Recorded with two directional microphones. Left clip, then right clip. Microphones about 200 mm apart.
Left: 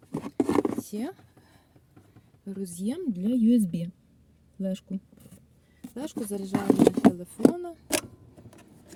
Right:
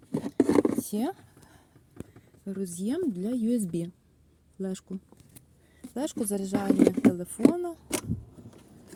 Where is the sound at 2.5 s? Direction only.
25° right (ahead or behind).